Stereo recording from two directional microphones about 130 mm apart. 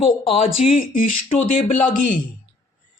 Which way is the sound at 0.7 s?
90° left.